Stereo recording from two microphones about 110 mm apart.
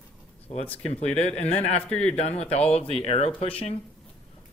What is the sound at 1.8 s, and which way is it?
Speech, 10° left (ahead or behind).